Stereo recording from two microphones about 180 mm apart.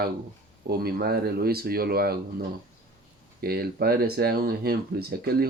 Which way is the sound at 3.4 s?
60° right (ahead or behind).